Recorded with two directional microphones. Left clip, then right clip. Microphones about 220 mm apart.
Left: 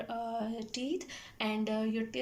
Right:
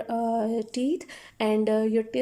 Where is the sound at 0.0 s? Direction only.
30° right (ahead or behind).